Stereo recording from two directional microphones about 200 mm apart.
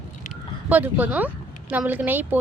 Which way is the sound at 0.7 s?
10° right (ahead or behind).